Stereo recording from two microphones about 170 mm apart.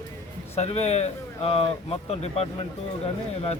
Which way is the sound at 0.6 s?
40° left (ahead or behind).